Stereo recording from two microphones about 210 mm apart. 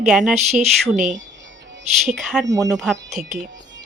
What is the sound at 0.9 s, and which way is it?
Speech, 35° right (ahead or behind).